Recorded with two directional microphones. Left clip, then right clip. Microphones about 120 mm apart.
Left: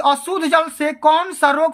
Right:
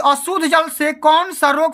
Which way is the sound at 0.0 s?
25° right (ahead or behind).